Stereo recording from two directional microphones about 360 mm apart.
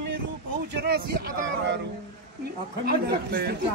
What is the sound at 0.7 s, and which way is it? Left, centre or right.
Speech, right.